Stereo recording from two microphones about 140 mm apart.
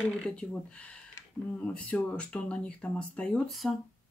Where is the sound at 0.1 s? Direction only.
5° left (ahead or behind).